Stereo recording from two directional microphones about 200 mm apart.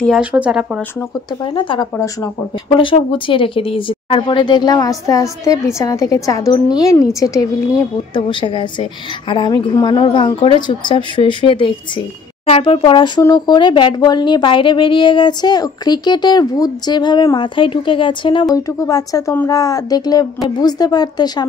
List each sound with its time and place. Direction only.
0.0 s speech: 5° right (ahead or behind)
1.4 s speech: 25° left (ahead or behind)